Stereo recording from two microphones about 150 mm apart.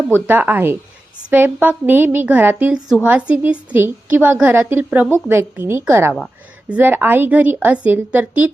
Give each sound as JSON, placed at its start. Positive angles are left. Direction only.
{"t": 0.3, "sound": "a woman's voice", "side_deg": -10}